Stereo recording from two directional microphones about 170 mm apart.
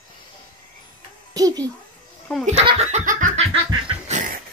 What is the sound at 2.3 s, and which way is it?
Speech, 10° left (ahead or behind).